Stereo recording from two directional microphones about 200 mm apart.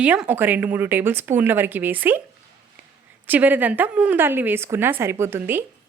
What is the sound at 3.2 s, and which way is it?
A woman's voice, 10° right (ahead or behind).